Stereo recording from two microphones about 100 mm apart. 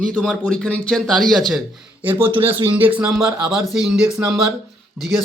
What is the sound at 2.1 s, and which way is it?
Speech, 20° right (ahead or behind).